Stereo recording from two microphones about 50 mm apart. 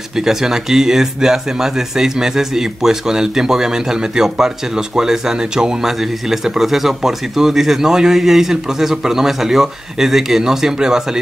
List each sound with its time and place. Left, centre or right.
0.2 s speech: centre